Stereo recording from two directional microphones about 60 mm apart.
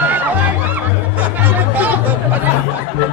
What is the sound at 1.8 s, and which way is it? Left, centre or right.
Chatter, right.